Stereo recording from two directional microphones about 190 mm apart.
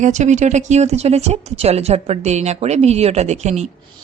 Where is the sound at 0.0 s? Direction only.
40° right (ahead or behind).